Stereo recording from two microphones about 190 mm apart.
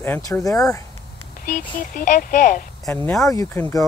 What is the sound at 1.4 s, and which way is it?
Speech, 45° left (ahead or behind).